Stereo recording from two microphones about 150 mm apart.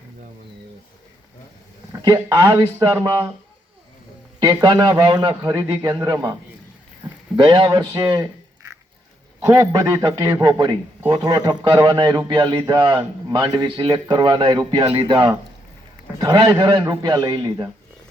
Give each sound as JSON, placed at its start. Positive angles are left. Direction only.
{"t": 1.9, "sound": "a man's voice", "side_deg": -25}
{"t": 4.4, "sound": "a man's voice", "side_deg": -25}
{"t": 7.3, "sound": "a man's voice", "side_deg": -35}